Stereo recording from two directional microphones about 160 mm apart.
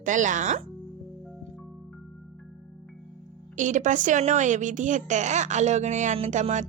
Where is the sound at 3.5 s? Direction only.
50° right (ahead or behind).